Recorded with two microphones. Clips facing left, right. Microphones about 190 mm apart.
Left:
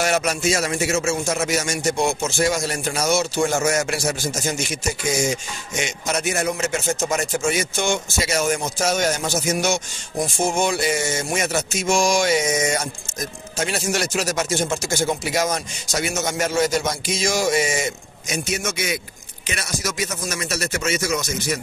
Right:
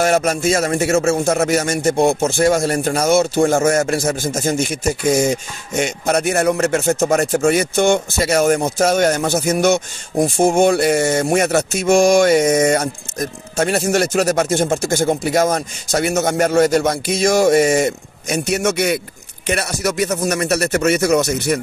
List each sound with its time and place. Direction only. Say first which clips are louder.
0.0 s a man's voice: right 5 dB; 45° right (ahead or behind)